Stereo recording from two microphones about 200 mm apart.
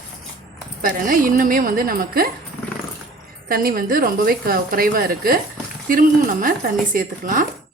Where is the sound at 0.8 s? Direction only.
45° right (ahead or behind).